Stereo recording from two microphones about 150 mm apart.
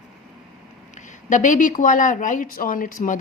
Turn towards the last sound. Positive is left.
turn(degrees=65)  # may be behind; listen again after turning